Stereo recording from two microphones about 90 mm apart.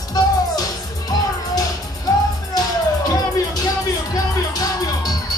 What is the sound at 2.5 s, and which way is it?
Music, 45° left (ahead or behind).